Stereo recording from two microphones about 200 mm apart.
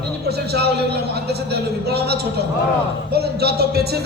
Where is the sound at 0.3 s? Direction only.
55° right (ahead or behind).